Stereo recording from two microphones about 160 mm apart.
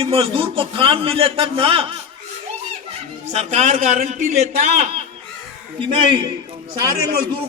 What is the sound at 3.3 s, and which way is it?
A man's voice, 40° right (ahead or behind).